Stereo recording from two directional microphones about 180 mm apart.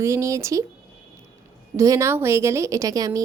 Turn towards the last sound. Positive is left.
turn(degrees=-20)  # may be behind; listen again after turning